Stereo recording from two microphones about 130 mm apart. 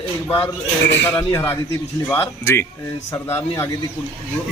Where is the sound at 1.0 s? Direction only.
20° left (ahead or behind).